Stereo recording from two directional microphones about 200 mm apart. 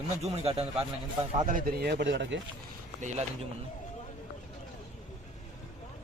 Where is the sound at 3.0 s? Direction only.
35° right (ahead or behind).